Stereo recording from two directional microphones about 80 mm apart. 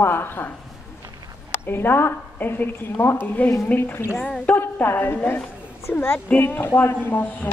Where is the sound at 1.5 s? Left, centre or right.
Left.